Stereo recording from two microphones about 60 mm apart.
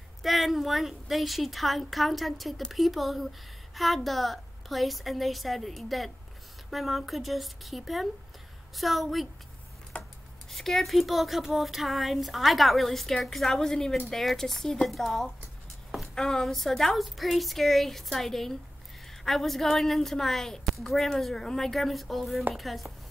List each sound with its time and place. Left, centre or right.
0.2 s speech: centre
9.9 s rub: left
10.5 s speech: centre